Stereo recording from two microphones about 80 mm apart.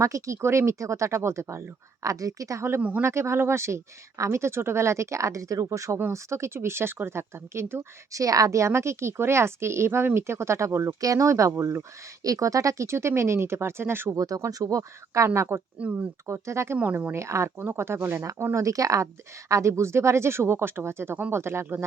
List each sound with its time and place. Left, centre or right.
0.0 s speech: right
3.0 s speech: right
8.2 s speech: right
14.2 s speech: right
15.3 s speech: right
16.7 s speech: centre
17.2 s speech: right